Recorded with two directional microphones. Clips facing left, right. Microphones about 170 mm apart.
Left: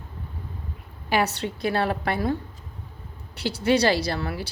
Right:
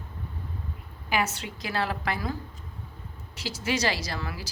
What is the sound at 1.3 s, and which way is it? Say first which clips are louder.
Speech: left 8 dB; 60° left (ahead or behind).